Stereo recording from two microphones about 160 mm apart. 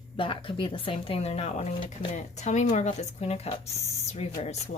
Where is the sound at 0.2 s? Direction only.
35° left (ahead or behind).